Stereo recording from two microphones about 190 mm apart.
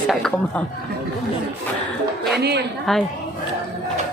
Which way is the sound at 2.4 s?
60° right (ahead or behind).